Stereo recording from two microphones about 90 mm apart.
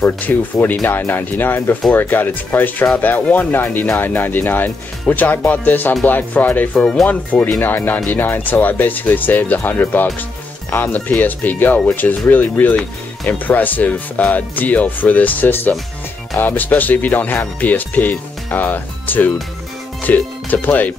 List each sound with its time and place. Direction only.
0.0 s speech: 20° left (ahead or behind)